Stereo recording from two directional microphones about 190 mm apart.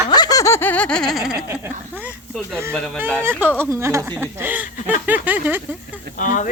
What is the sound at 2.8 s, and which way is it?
Laughter, 5° left (ahead or behind).